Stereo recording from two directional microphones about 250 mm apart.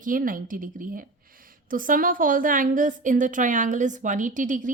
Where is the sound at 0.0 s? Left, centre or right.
Right.